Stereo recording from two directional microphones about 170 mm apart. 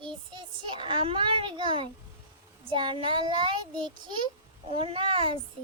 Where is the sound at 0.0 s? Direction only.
25° right (ahead or behind).